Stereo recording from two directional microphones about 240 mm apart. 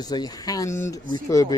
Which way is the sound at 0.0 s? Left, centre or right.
Centre.